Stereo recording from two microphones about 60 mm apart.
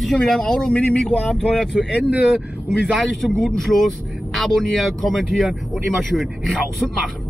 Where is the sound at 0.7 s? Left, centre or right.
Left.